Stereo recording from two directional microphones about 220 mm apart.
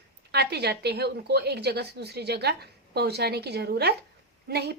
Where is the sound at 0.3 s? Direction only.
50° right (ahead or behind).